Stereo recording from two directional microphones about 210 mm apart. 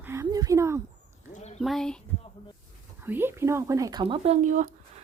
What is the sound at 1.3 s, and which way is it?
Speech, 30° left (ahead or behind).